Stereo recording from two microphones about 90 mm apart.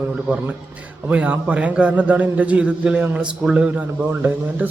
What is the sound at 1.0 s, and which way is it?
A man's voice, 15° right (ahead or behind).